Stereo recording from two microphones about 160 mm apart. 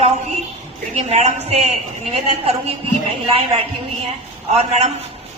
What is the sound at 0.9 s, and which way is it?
A man's voice, 40° right (ahead or behind).